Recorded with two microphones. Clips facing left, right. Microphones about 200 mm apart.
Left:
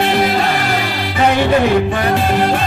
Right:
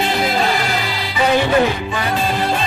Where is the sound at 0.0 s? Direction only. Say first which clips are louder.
Left 3 dB; 60° left (ahead or behind).